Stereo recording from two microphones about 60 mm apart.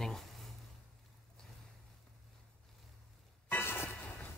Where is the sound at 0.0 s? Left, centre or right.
Centre.